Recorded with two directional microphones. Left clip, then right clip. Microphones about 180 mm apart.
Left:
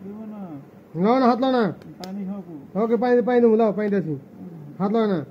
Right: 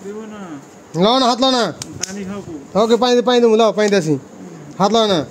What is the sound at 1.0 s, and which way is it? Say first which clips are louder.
Speech: right 5 dB; 60° right (ahead or behind).